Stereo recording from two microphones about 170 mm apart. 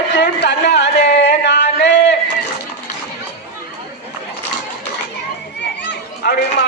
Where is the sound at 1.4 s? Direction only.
90° left.